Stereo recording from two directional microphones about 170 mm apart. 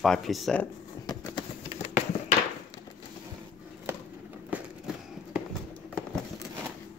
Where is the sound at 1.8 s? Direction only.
40° left (ahead or behind).